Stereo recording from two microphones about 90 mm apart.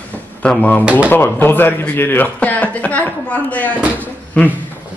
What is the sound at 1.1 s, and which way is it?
A man's voice, 25° left (ahead or behind).